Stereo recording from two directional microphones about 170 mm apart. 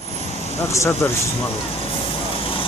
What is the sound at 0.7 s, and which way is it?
Speech, 15° left (ahead or behind).